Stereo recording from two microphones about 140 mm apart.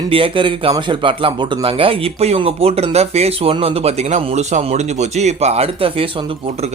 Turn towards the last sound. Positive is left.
turn(degrees=-40)  # may be behind; listen again after turning